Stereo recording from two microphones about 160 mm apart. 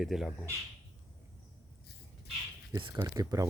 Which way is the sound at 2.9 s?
20° right (ahead or behind).